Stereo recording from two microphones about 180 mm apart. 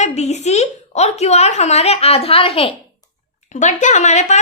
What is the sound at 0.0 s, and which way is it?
Speech, 40° left (ahead or behind).